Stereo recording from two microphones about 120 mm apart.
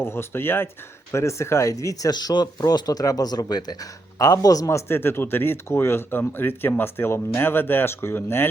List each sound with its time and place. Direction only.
0.0 s speech: 20° left (ahead or behind)